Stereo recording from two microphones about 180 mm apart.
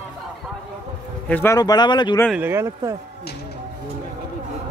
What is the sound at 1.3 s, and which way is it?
Speech, 15° left (ahead or behind).